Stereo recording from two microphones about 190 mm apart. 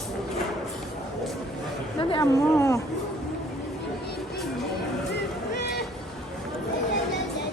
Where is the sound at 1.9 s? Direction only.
25° left (ahead or behind).